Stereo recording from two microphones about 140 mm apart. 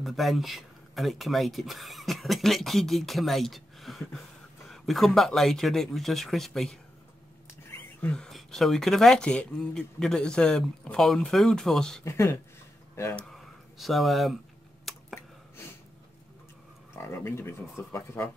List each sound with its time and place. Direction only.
0.0 s speech: centre (ahead or behind)
8.0 s speech: 5° left (ahead or behind)
12.0 s speech: 20° left (ahead or behind)
13.1 s speech: centre (ahead or behind)
14.9 s a sound: centre (ahead or behind)
16.9 s speech: 15° left (ahead or behind)